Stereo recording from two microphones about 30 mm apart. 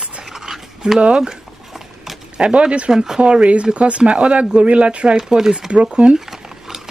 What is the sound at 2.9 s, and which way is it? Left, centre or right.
Speech, centre.